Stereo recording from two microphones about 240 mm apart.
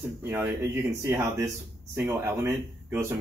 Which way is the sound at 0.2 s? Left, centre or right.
Centre.